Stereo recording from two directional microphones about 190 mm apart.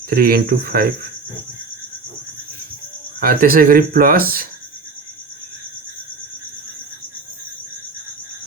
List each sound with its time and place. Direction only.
0.1 s speech: 50° right (ahead or behind)
3.2 s speech: 50° right (ahead or behind)